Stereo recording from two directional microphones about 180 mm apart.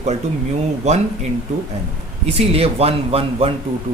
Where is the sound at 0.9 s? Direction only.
40° right (ahead or behind).